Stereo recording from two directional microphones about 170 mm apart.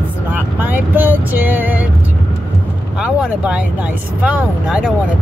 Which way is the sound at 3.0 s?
5° right (ahead or behind).